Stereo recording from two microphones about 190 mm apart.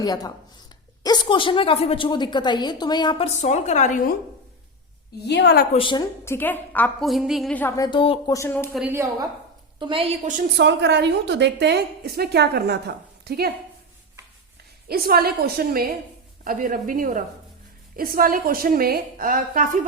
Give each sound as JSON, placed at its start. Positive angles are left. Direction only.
{"t": 0.0, "sound": "a woman's voice", "side_deg": 20}
{"t": 3.2, "sound": "a woman's voice", "side_deg": 35}
{"t": 5.2, "sound": "a woman's voice", "side_deg": 65}
{"t": 5.8, "sound": "a woman's voice", "side_deg": 25}
{"t": 6.2, "sound": "a woman's voice", "side_deg": 10}
{"t": 7.8, "sound": "a woman's voice", "side_deg": 25}
{"t": 8.3, "sound": "a woman's voice", "side_deg": 15}
{"t": 8.7, "sound": "a woman's voice", "side_deg": -10}
{"t": 9.7, "sound": "a woman's voice", "side_deg": -25}
{"t": 10.6, "sound": "a woman's voice", "side_deg": -65}
{"t": 14.8, "sound": "a woman's voice", "side_deg": -55}